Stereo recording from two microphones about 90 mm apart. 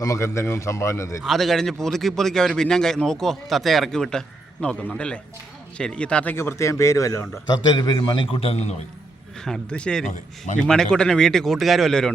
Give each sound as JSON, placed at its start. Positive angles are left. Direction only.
{"t": 0.0, "sound": "a man's voice", "side_deg": 35}
{"t": 1.3, "sound": "a man's voice", "side_deg": 0}
{"t": 6.3, "sound": "a man's voice", "side_deg": 30}
{"t": 7.4, "sound": "a man's voice", "side_deg": 50}
{"t": 9.4, "sound": "a man's voice", "side_deg": 10}